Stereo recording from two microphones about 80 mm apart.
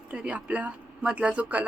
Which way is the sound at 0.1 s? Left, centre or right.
Centre.